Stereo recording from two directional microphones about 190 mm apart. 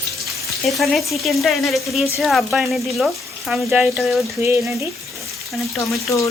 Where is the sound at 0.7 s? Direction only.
Centre (ahead or behind).